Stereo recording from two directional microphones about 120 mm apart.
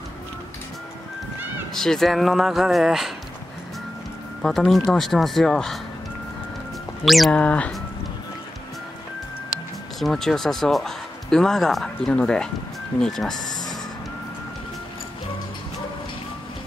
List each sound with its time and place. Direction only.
1.7 s speech: 5° left (ahead or behind)
4.4 s speech: 5° left (ahead or behind)
7.1 s speech: centre (ahead or behind)
7.3 s speech: 10° left (ahead or behind)
9.9 s speech: centre (ahead or behind)
13.4 s music: 35° left (ahead or behind)